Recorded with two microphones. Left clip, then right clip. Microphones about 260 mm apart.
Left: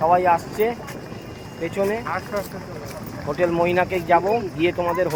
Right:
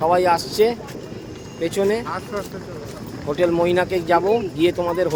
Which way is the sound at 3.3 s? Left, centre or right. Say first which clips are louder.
Right 2 dB; centre.